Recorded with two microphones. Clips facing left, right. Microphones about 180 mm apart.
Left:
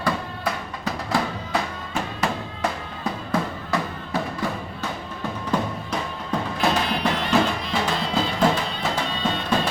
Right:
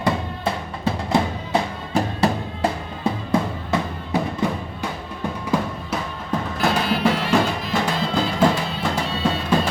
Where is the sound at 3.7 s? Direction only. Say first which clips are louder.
Right 3 dB; 20° right (ahead or behind).